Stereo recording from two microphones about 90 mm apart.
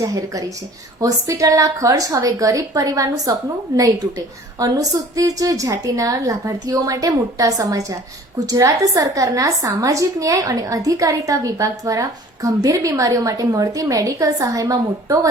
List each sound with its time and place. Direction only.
0.0 s a woman's voice: 45° right (ahead or behind)
4.6 s a woman's voice: 40° right (ahead or behind)